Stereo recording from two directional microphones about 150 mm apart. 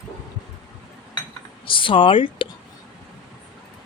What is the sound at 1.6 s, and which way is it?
Speech, 35° left (ahead or behind).